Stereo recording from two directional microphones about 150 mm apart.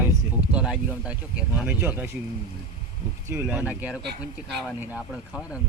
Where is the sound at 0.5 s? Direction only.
5° right (ahead or behind).